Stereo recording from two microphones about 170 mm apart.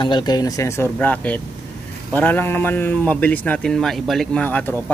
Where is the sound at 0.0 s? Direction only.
25° left (ahead or behind).